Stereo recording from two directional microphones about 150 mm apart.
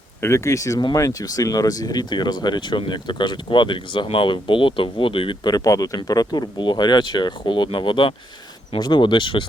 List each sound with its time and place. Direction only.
0.2 s speech: 15° left (ahead or behind); by 9.5 s 35° left (ahead or behind)